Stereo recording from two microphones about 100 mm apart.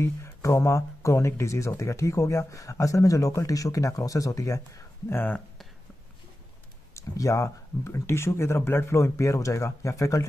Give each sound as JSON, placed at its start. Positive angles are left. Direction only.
{"t": 0.0, "sound": "speech", "side_deg": 30}
{"t": 5.1, "sound": "speech", "side_deg": 20}
{"t": 6.9, "sound": "speech", "side_deg": 35}